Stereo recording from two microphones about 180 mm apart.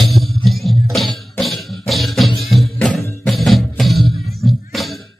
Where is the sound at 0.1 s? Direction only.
Centre (ahead or behind).